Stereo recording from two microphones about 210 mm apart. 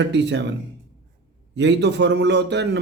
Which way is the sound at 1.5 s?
55° right (ahead or behind).